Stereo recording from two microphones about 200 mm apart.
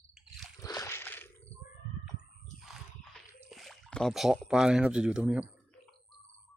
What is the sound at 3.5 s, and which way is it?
Speech, centre (ahead or behind).